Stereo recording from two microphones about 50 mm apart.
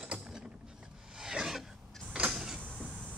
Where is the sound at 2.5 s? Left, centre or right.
Left.